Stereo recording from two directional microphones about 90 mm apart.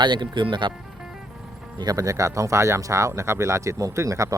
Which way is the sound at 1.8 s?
45° right (ahead or behind).